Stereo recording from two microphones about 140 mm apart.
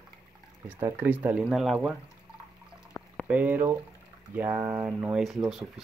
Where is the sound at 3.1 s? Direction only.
10° right (ahead or behind).